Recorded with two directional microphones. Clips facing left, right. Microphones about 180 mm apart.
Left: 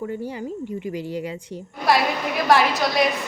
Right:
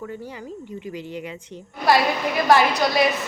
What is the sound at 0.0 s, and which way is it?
Speech, 30° left (ahead or behind).